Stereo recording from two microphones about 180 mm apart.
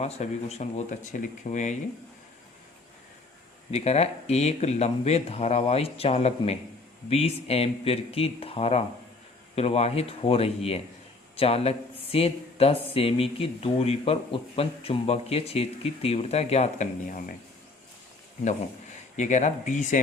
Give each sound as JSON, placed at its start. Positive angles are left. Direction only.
{"t": 0.0, "sound": "speech", "side_deg": 35}
{"t": 3.7, "sound": "speech", "side_deg": 35}
{"t": 19.1, "sound": "speech", "side_deg": 40}